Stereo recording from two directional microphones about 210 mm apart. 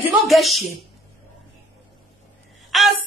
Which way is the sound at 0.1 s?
Centre (ahead or behind).